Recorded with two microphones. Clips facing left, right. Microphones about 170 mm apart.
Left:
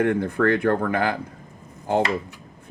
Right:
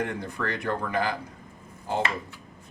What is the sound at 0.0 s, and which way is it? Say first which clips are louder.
Speech: left 10 dB; 55° left (ahead or behind).